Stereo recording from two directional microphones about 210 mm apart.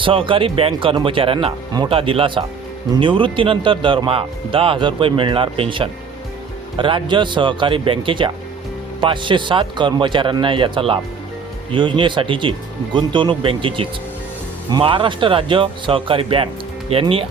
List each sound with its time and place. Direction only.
0.0 s speech: 25° right (ahead or behind)